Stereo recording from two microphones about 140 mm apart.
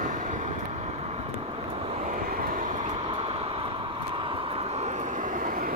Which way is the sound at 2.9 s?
45° right (ahead or behind).